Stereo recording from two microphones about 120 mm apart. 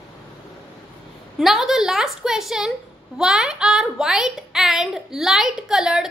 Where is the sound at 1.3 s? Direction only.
Centre (ahead or behind).